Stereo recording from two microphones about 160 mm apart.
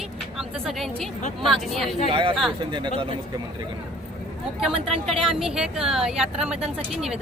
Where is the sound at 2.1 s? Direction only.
30° right (ahead or behind).